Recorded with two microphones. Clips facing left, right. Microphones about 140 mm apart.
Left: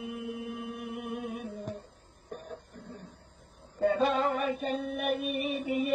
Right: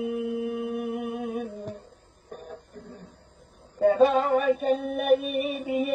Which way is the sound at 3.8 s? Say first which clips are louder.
Right 6 dB; 50° right (ahead or behind).